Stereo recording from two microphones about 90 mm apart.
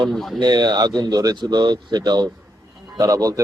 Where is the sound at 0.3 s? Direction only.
50° right (ahead or behind).